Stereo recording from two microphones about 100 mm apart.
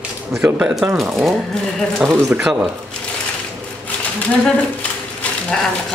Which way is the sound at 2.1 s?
20° right (ahead or behind).